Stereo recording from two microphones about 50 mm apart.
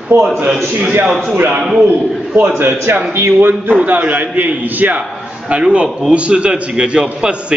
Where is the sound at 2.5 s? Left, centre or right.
Right.